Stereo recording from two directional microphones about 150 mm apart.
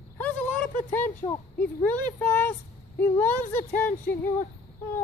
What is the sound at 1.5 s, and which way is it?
Speech, 10° left (ahead or behind).